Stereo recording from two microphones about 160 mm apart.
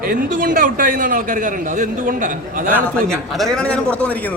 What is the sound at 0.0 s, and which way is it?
A man's voice, 60° right (ahead or behind).